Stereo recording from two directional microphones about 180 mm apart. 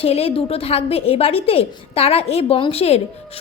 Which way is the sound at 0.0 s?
35° left (ahead or behind).